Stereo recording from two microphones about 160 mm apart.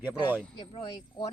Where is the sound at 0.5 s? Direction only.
30° left (ahead or behind).